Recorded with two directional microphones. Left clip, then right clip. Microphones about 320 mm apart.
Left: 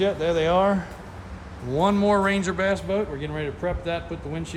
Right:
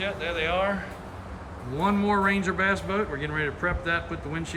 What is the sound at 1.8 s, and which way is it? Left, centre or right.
A man's voice, centre.